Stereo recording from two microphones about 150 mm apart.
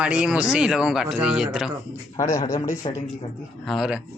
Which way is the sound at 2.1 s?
20° left (ahead or behind).